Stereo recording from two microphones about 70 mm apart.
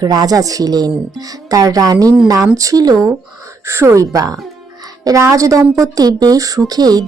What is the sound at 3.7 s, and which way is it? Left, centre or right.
Speech, right.